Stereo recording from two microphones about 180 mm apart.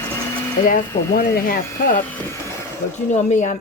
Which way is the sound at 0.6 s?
45° left (ahead or behind).